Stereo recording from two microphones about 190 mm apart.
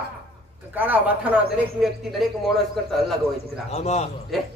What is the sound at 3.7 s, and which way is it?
Speech, 35° left (ahead or behind).